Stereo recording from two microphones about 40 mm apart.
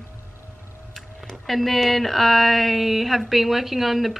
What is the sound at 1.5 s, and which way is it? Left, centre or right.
Speech, centre.